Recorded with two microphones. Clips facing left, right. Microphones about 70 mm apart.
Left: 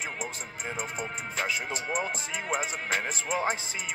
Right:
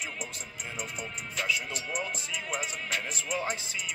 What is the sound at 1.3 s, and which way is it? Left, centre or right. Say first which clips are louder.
Speech: even; left.